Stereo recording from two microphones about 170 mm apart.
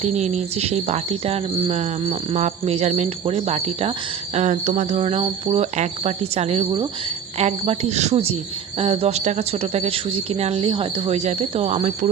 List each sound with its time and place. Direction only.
0.0 s speech: 40° right (ahead or behind)
10.4 s speech: 35° right (ahead or behind)